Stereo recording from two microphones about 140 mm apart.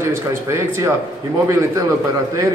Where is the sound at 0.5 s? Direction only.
20° right (ahead or behind).